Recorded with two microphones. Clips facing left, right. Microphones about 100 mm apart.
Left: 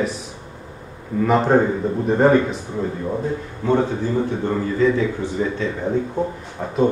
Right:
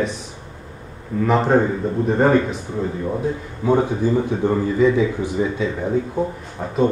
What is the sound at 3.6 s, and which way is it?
A man's voice, 10° right (ahead or behind).